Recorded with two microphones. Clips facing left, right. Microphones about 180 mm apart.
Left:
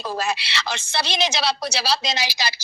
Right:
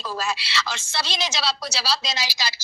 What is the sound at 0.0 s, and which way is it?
A woman's voice, 65° left (ahead or behind).